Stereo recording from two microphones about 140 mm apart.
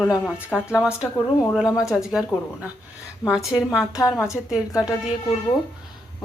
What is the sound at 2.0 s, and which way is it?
A woman's voice, 5° right (ahead or behind).